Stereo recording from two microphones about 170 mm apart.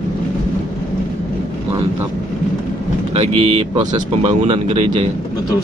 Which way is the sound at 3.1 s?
40° right (ahead or behind).